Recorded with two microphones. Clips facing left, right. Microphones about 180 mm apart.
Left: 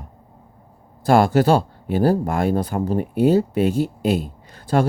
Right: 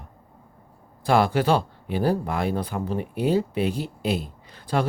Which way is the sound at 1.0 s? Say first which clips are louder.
Left 5 dB; 45° left (ahead or behind).